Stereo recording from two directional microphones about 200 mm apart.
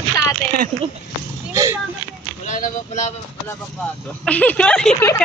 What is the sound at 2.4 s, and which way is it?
Speech, 40° left (ahead or behind).